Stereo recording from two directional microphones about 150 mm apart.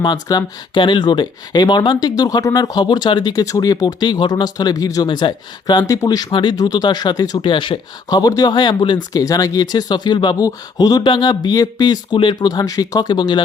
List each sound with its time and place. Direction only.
0.0 s speech: 25° left (ahead or behind)